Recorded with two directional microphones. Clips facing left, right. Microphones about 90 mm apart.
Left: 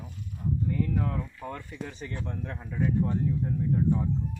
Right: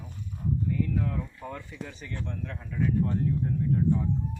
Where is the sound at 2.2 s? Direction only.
30° left (ahead or behind).